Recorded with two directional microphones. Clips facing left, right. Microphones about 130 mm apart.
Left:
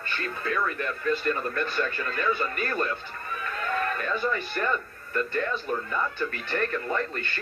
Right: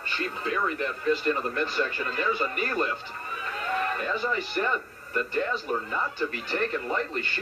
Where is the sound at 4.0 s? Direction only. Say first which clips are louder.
Left 1 dB; 20° right (ahead or behind).